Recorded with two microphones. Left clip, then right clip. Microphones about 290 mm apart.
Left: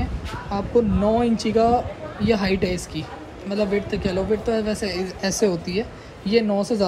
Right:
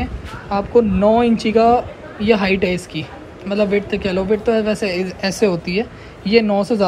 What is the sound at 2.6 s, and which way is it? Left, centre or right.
Speech, left.